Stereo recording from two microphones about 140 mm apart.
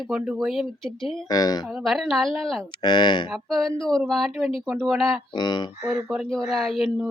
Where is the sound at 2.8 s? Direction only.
30° left (ahead or behind).